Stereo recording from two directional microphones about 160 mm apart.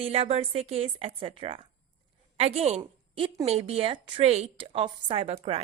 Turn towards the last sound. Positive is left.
turn(degrees=-40)  # may be behind; listen again after turning